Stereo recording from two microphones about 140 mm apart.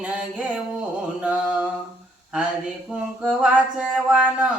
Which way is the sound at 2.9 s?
10° right (ahead or behind).